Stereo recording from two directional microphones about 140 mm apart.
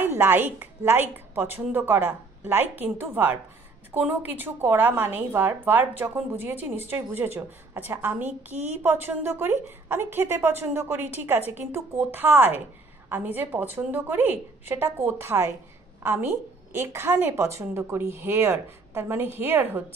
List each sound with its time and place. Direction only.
0.0 s a woman's voice: 15° right (ahead or behind)